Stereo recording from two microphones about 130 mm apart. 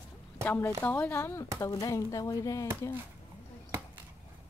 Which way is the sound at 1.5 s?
30° left (ahead or behind).